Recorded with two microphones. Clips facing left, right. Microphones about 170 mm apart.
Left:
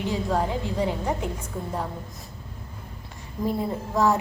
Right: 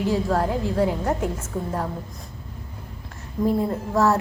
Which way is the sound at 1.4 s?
10° left (ahead or behind).